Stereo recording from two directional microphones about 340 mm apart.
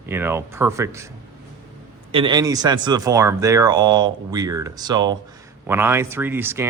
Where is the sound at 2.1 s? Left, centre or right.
Centre.